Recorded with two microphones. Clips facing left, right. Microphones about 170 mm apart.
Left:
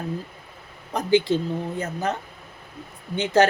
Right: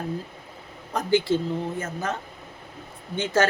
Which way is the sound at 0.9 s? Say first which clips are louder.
Left 2 dB; 20° left (ahead or behind).